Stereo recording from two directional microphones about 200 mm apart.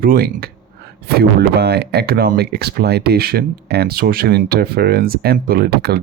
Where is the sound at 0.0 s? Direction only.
45° right (ahead or behind).